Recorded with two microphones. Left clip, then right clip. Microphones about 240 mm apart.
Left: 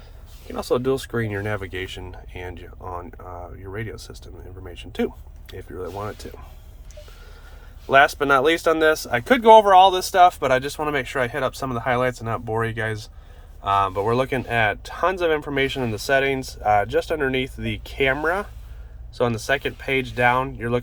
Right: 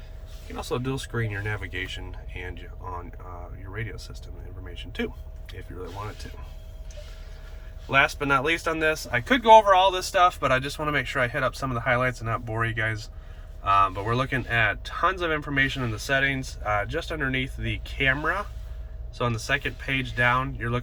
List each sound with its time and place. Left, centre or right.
0.5 s speech: left
7.9 s speech: left